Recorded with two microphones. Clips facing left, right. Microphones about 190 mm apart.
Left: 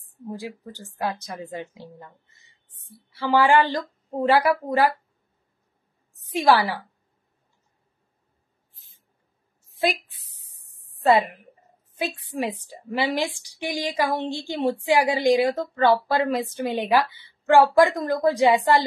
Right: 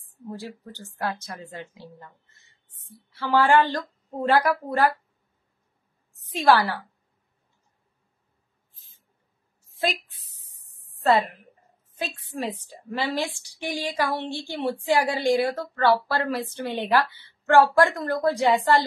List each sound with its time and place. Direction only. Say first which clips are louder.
0.3 s a woman's voice: left 2 dB; 15° left (ahead or behind)
3.2 s a woman's voice: left 1 dB; 10° left (ahead or behind)
6.3 s a woman's voice: left 1 dB; 15° left (ahead or behind)
9.8 s a sound: left 3 dB; 15° left (ahead or behind)
11.1 s a woman's voice: left 2 dB; 15° left (ahead or behind)